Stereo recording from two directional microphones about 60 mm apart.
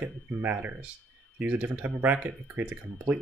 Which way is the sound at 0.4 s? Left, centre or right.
Right.